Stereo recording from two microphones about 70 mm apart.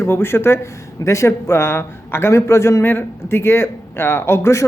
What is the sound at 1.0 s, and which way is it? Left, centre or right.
A man's voice, left.